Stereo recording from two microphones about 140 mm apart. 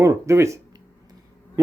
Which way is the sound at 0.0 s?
20° right (ahead or behind).